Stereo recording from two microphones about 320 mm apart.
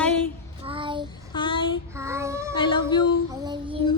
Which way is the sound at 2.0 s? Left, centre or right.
Centre.